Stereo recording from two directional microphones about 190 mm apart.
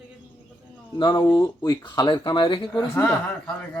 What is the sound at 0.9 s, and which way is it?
Speech, 25° left (ahead or behind).